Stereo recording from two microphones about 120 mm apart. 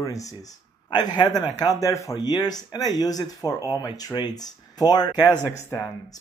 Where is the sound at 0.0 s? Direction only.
30° left (ahead or behind).